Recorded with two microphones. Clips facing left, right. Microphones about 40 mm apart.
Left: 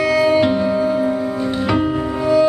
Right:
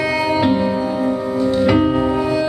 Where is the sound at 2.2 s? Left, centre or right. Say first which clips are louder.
Left 3 dB; centre.